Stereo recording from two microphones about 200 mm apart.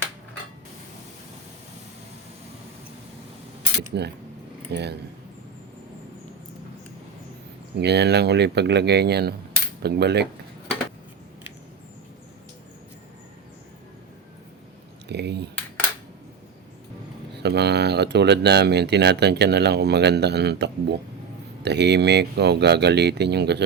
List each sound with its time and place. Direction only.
3.9 s speech: 55° right (ahead or behind)
7.8 s speech: 55° right (ahead or behind)
15.0 s speech: 55° right (ahead or behind)
17.4 s speech: 55° right (ahead or behind)